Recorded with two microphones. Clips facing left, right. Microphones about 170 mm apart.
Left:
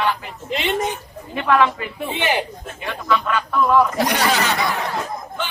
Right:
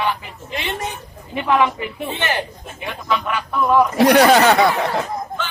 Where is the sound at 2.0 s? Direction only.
15° left (ahead or behind).